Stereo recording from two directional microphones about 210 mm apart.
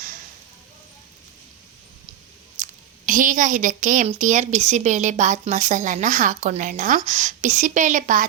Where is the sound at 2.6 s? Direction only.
35° right (ahead or behind).